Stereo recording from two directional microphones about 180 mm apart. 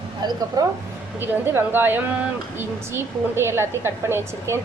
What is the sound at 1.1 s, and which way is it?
A woman's voice, 10° right (ahead or behind).